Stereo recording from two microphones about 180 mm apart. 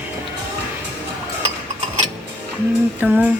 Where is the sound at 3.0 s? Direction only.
10° right (ahead or behind).